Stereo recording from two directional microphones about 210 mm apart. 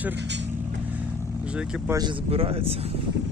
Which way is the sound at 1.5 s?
5° right (ahead or behind).